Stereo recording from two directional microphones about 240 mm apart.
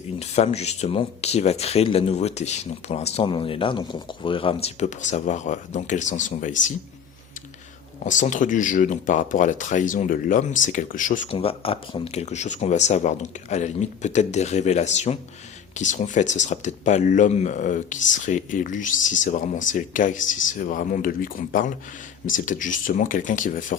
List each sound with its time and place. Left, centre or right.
0.2 s speech: left
8.0 s speech: left